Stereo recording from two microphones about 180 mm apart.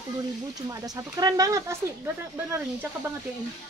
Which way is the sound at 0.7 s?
20° right (ahead or behind).